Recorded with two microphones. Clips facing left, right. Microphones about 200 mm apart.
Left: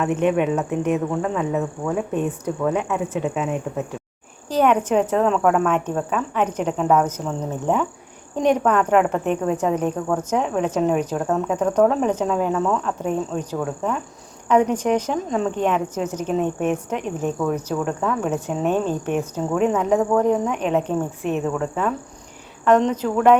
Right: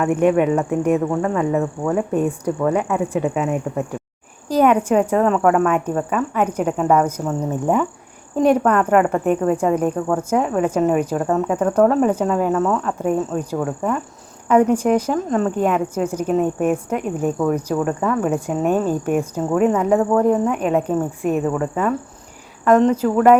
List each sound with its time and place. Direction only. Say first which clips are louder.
0.1 s speech: right 5 dB; 55° right (ahead or behind)
0.9 s speech: right 3 dB; centre (ahead or behind)